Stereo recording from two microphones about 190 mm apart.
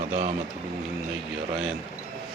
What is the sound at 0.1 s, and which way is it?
Speech, 40° right (ahead or behind).